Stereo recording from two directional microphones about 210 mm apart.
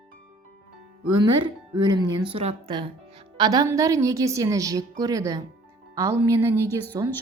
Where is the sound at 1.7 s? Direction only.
20° right (ahead or behind).